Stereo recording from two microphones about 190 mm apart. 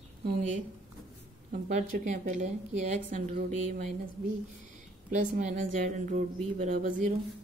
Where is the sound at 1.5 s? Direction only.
45° right (ahead or behind).